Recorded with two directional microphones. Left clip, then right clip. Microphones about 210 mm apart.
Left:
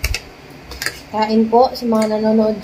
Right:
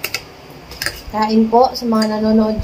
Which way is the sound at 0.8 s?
15° right (ahead or behind).